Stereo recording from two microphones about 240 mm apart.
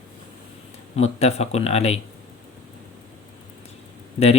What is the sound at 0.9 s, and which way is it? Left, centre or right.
Speech, left.